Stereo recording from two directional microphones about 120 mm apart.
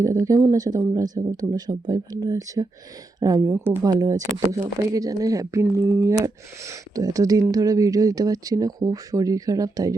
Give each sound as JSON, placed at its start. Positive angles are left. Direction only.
{"t": 0.0, "sound": "speech", "side_deg": -30}
{"t": 3.5, "sound": "a woman's voice", "side_deg": -20}
{"t": 3.8, "sound": "speech", "side_deg": -30}